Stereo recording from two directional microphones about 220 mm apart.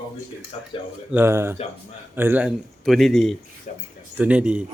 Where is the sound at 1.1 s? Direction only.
10° right (ahead or behind).